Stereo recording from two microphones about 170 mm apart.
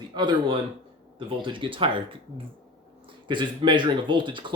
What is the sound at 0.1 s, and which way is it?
A man's voice, 25° right (ahead or behind).